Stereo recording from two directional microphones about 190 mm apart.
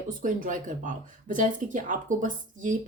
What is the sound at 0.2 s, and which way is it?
Speech, 45° right (ahead or behind).